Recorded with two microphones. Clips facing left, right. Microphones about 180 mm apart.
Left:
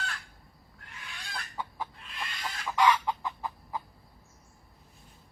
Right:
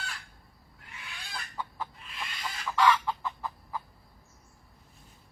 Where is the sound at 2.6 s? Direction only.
15° left (ahead or behind).